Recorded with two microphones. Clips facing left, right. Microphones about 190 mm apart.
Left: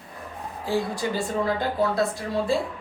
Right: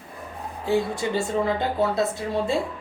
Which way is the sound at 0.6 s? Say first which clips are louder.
Right 2 dB; 25° right (ahead or behind).